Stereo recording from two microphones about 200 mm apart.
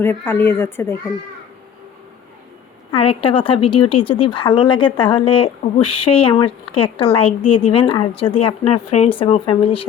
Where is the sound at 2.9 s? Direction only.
30° left (ahead or behind).